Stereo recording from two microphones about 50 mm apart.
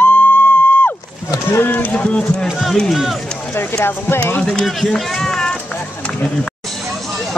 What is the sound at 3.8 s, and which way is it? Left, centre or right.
Speech, left.